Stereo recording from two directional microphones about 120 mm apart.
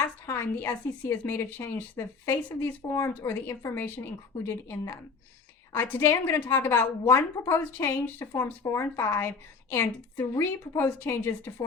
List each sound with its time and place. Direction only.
0.3 s a woman's voice: 20° left (ahead or behind)